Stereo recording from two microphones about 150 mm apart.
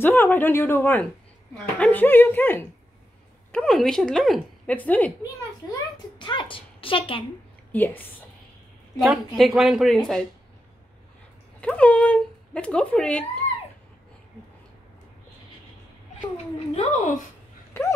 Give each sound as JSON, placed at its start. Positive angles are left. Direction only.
{"t": 0.0, "sound": "a woman's voice", "side_deg": 15}
{"t": 5.6, "sound": "a child's voice", "side_deg": 25}
{"t": 7.7, "sound": "speech", "side_deg": 10}
{"t": 8.9, "sound": "a woman's voice", "side_deg": 0}
{"t": 11.6, "sound": "speech", "side_deg": 10}
{"t": 16.5, "sound": "speech", "side_deg": 45}